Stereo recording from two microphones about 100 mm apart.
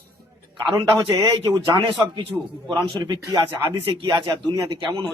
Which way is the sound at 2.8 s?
45° right (ahead or behind).